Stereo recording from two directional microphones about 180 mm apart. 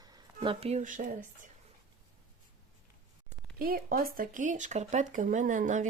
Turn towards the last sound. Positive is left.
turn(degrees=-45)  # may be behind; listen again after turning